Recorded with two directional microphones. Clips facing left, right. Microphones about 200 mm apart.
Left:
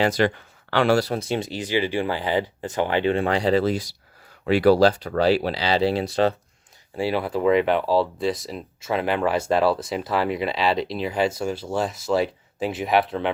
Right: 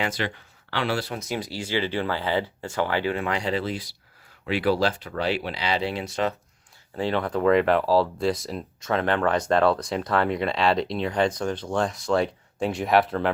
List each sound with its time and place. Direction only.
0.0 s speech: 40° left (ahead or behind)
6.9 s speech: 10° left (ahead or behind)